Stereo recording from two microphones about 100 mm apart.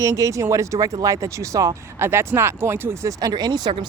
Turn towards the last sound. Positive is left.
turn(degrees=-45)  # may be behind; listen again after turning